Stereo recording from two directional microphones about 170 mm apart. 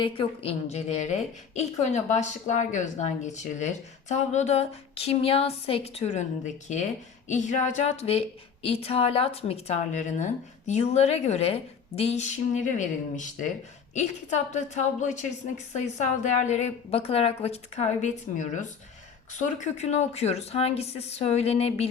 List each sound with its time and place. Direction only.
0.0 s a woman's voice: 35° left (ahead or behind)